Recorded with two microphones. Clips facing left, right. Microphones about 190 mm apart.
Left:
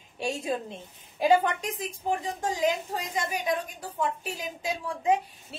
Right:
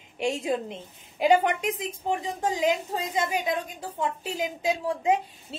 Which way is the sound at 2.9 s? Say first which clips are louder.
Right 4 dB; 25° right (ahead or behind).